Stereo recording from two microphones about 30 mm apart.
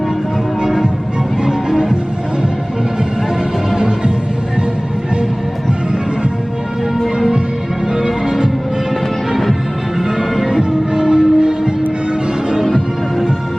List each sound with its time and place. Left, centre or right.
0.6 s music: centre
3.8 s music: right
7.9 s music: centre
9.3 s music: centre
10.2 s music: centre
10.9 s music: right